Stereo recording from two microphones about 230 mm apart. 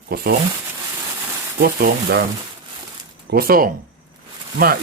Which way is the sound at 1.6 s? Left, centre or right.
Right.